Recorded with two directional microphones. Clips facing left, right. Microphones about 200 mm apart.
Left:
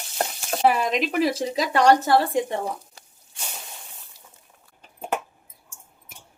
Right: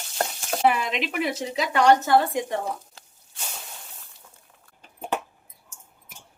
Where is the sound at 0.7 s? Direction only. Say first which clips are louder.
Left 4 dB; 40° left (ahead or behind).